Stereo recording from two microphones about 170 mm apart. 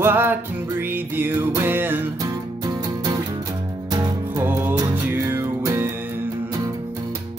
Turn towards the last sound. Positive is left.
turn(degrees=-15)  # may be behind; listen again after turning